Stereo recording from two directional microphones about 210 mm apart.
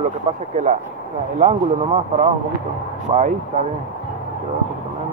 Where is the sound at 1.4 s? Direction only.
35° right (ahead or behind).